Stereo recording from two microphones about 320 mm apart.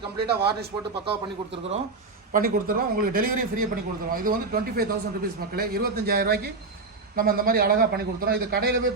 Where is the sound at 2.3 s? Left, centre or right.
Right.